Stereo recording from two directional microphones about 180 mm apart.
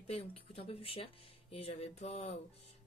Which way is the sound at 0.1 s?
35° left (ahead or behind).